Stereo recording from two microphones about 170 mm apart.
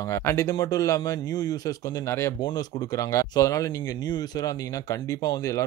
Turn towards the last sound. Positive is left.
turn(degrees=20)  # may be behind; listen again after turning